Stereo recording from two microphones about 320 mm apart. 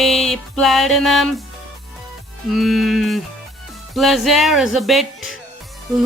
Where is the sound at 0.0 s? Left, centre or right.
Centre.